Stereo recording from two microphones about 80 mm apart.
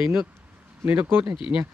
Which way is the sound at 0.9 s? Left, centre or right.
Right.